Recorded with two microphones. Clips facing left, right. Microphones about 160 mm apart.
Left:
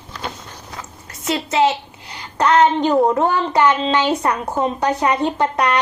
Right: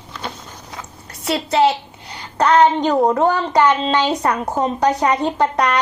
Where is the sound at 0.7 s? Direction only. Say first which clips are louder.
Even; 35° right (ahead or behind).